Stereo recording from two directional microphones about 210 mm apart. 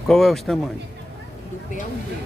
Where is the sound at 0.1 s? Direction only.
Centre (ahead or behind).